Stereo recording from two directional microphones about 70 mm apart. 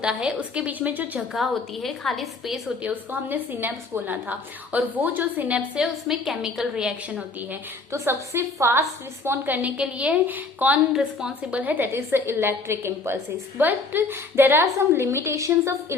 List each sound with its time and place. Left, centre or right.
0.0 s a woman's voice: centre
1.3 s a woman's voice: centre
2.8 s a woman's voice: right
5.5 s a woman's voice: centre
7.9 s a woman's voice: right
9.6 s a woman's voice: centre
11.9 s a woman's voice: right